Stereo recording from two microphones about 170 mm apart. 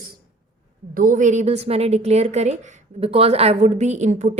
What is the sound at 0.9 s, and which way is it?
A woman's voice, 50° right (ahead or behind).